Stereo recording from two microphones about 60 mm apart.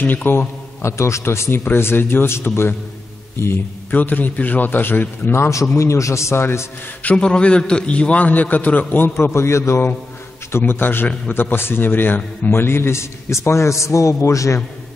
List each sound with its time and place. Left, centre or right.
0.0 s a man's voice: left
3.9 s a man's voice: left
5.8 s a man's voice: left
7.0 s a man's voice: left
10.5 s a man's voice: left